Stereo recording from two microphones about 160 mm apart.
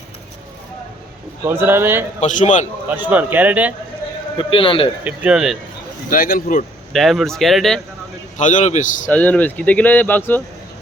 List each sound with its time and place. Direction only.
1.5 s speech: 15° right (ahead or behind)
2.2 s a man's voice: 50° left (ahead or behind)
2.9 s speech: 10° right (ahead or behind)
4.4 s a man's voice: 35° left (ahead or behind)
5.0 s speech: 10° right (ahead or behind)
6.1 s speech: 65° left (ahead or behind)
6.9 s speech: centre (ahead or behind)
8.4 s a man's voice: 50° left (ahead or behind)
9.0 s speech: 10° left (ahead or behind)